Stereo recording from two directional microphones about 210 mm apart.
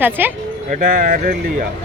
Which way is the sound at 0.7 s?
40° right (ahead or behind).